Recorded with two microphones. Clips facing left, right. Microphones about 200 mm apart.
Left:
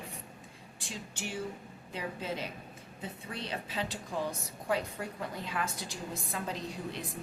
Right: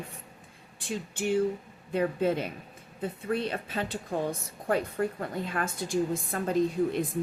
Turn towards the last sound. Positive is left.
turn(degrees=-50)  # may be behind; listen again after turning